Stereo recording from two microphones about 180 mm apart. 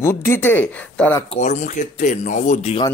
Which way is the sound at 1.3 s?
40° left (ahead or behind).